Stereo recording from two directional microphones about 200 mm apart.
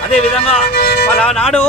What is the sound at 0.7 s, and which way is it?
Speech, 55° left (ahead or behind).